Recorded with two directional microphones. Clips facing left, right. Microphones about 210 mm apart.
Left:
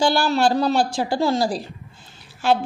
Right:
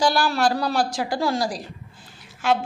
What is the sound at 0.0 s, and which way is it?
A woman's voice, 25° left (ahead or behind).